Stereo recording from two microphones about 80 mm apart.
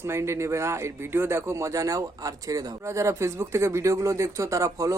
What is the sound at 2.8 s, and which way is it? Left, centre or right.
Speech, right.